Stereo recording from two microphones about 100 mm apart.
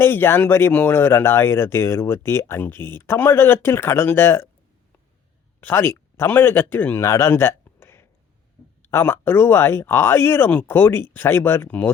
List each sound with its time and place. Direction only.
0.0 s speech: 25° left (ahead or behind)
5.5 s speech: 20° left (ahead or behind)
7.0 s a sound: 25° left (ahead or behind)
8.9 s speech: 25° left (ahead or behind)